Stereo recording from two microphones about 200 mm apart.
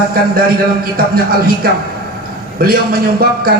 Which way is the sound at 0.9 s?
50° right (ahead or behind).